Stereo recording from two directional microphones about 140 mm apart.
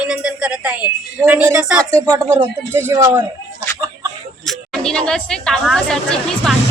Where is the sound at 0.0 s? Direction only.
5° right (ahead or behind).